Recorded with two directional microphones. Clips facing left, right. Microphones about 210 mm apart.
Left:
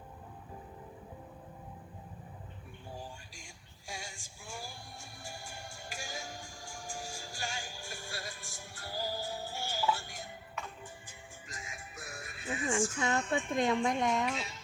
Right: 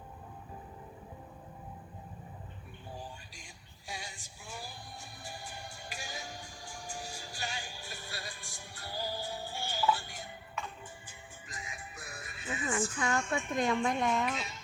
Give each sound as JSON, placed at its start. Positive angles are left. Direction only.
{"t": 3.3, "sound": "music", "side_deg": 45}
{"t": 13.0, "sound": "speech", "side_deg": 25}